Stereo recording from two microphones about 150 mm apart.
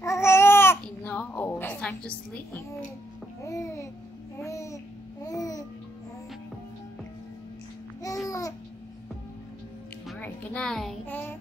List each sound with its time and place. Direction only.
0.0 s babbling: 20° left (ahead or behind)
3.4 s babbling: 20° left (ahead or behind)
8.0 s babbling: 20° left (ahead or behind)
10.0 s music: 10° left (ahead or behind)